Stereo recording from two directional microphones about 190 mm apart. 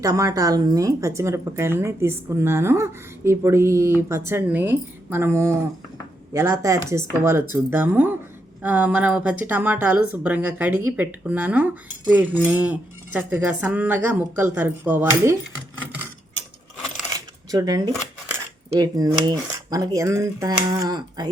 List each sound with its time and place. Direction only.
0.0 s speech: 15° right (ahead or behind)
17.2 s a sound: 20° right (ahead or behind)
18.7 s speech: 20° right (ahead or behind)